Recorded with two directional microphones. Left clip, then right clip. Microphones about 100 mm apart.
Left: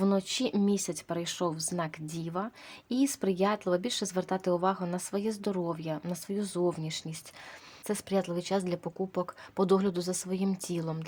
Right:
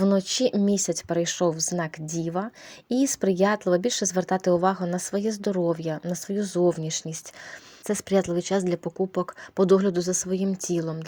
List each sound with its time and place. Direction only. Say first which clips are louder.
0.1 s a woman's voice: right 7 dB; 45° right (ahead or behind)